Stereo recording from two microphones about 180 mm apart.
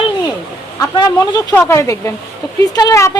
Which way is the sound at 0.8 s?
20° left (ahead or behind).